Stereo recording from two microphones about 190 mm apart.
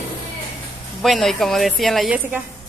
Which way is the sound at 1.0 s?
Centre (ahead or behind).